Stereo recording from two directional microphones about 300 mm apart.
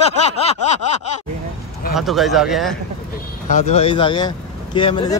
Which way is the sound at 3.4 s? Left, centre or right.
Left.